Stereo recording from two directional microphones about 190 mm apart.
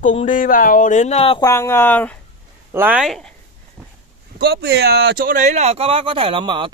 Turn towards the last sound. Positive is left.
turn(degrees=-25)  # may be behind; listen again after turning